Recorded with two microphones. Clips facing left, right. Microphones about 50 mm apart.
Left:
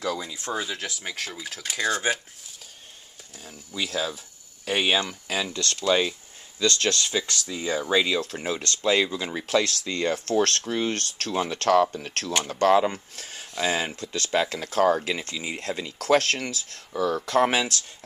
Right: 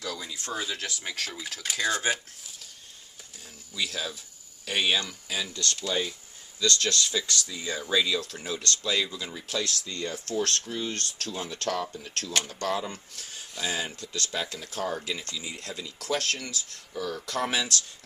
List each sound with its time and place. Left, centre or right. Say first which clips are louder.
0.2 s speech: left 4 dB; centre
3.4 s speech: left 2 dB; left
5.3 s speech: left 3 dB; left
5.9 s speech: left 9 dB; left
6.6 s speech: left 3 dB; left
9.3 s speech: left 8 dB; left
12.4 s speech: left 11 dB; left
13.8 s speech: left 4 dB; left
14.3 s speech: left 13 dB; left
15.0 s speech: left 5 dB; left